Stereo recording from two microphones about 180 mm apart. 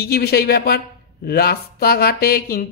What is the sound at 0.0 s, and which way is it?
Speech, 60° left (ahead or behind).